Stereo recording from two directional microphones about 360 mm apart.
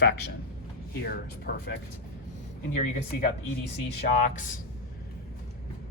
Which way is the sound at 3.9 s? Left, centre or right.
Left.